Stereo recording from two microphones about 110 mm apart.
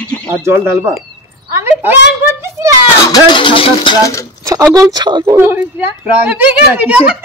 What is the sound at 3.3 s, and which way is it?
Speech, 50° left (ahead or behind).